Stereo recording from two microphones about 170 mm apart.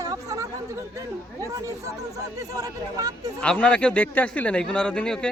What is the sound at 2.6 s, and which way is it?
Speech, 20° right (ahead or behind).